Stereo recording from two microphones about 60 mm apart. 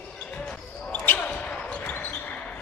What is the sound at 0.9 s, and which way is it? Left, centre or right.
Basketball bounce, left.